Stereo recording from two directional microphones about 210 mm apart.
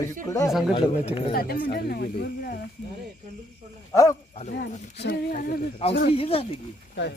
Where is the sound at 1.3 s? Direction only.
45° left (ahead or behind).